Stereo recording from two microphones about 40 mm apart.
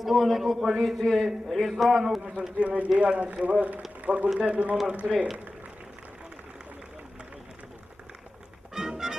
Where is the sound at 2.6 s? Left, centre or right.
Right.